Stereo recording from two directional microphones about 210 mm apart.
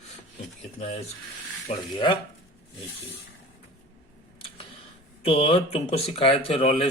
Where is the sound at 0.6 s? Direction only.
30° left (ahead or behind).